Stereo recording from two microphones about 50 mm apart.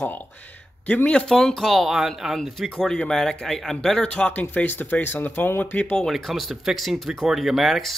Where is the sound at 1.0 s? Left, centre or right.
Centre.